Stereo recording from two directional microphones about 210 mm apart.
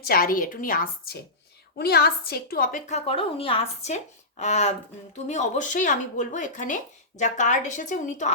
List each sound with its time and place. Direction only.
0.0 s a woman's voice: 45° left (ahead or behind)